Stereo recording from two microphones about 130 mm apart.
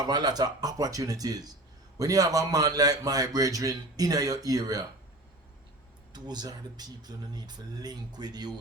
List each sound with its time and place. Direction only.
0.0 s a man's voice: 30° right (ahead or behind)
6.1 s speech: 30° right (ahead or behind)